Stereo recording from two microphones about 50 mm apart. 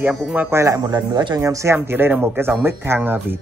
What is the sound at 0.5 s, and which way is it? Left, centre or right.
Speech, right.